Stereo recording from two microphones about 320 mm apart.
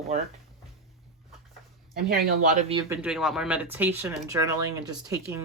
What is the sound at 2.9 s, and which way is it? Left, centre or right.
Speech, centre.